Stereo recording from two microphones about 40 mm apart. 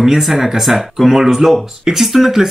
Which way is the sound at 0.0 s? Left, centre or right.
Centre.